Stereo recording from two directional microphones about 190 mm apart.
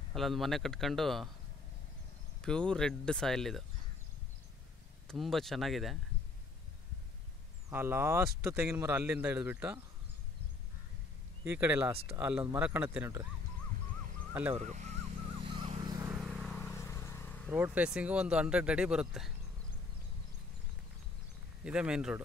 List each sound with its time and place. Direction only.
0.1 s speech: centre (ahead or behind)
2.4 s speech: 5° left (ahead or behind)
5.0 s speech: centre (ahead or behind)
7.7 s speech: 10° right (ahead or behind)
11.4 s speech: 10° right (ahead or behind)
13.8 s owl: 45° right (ahead or behind)
14.3 s speech: 10° right (ahead or behind)
14.6 s a sound: 40° right (ahead or behind); by 16.1 s 20° right (ahead or behind)
16.1 s vehicle: 5° right (ahead or behind)
17.5 s speech: 10° right (ahead or behind)
21.6 s speech: 5° right (ahead or behind)